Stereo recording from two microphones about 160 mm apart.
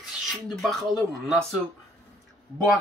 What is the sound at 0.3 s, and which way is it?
Speech, centre (ahead or behind).